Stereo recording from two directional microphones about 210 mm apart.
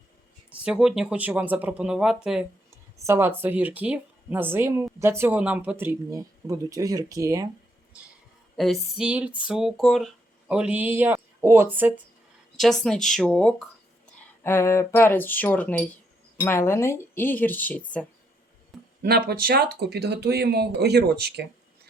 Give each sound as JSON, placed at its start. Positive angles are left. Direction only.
{"t": 0.5, "sound": "speech", "side_deg": -5}
{"t": 8.5, "sound": "speech", "side_deg": 0}
{"t": 12.8, "sound": "speech", "side_deg": 0}
{"t": 19.0, "sound": "speech", "side_deg": -50}